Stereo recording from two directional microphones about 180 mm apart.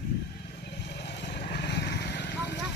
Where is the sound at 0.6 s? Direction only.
70° left (ahead or behind).